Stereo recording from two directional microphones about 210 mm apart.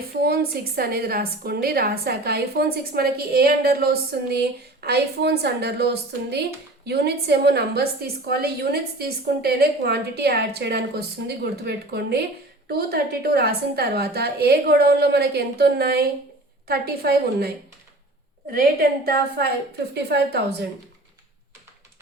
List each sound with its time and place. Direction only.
0.1 s a woman's voice: 45° right (ahead or behind)
18.5 s a woman's voice: 45° right (ahead or behind)